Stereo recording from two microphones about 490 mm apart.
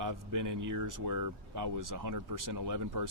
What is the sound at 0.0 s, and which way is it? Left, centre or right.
Speech, right.